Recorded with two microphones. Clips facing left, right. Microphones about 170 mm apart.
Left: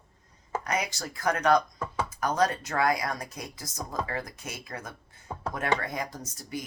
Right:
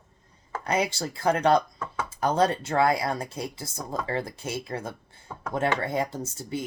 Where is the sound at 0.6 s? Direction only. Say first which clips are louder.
Right 7 dB; 30° right (ahead or behind).